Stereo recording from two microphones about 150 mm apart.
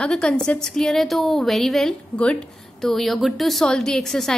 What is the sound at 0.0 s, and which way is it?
A woman's voice, 5° left (ahead or behind).